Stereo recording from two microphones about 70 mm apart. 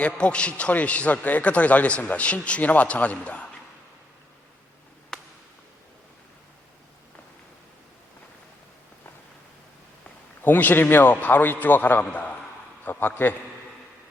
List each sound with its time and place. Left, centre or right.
0.0 s a man's voice: centre
5.1 s a sound: centre
10.4 s a man's voice: left